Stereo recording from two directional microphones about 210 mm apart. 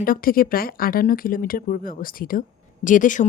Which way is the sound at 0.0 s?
45° left (ahead or behind).